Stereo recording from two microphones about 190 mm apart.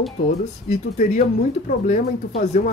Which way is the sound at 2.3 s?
40° left (ahead or behind).